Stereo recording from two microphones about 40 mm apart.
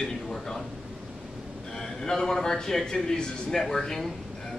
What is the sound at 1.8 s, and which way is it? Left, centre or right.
A man's voice, centre.